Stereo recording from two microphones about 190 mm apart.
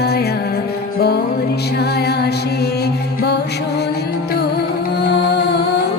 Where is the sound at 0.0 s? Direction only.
60° left (ahead or behind).